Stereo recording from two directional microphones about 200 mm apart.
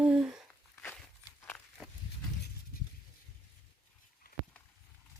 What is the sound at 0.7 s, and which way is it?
Walk, 10° left (ahead or behind).